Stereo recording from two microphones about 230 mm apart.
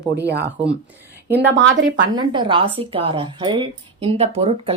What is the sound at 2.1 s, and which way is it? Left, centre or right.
Speech, right.